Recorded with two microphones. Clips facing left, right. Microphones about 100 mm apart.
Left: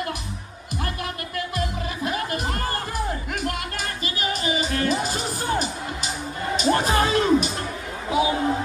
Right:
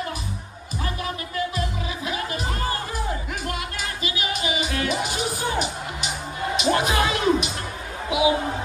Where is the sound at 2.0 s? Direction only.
50° left (ahead or behind).